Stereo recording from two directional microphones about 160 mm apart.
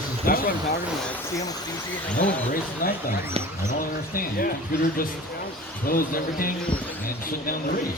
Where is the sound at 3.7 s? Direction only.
60° left (ahead or behind).